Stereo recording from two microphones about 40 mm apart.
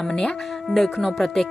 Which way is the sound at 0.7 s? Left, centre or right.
Centre.